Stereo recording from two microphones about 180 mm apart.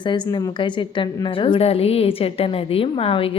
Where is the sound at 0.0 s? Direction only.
25° left (ahead or behind).